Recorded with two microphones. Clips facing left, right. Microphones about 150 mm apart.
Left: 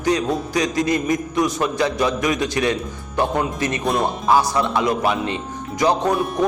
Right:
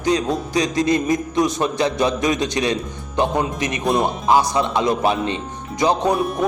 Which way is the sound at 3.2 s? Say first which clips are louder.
Right 1 dB; 20° right (ahead or behind).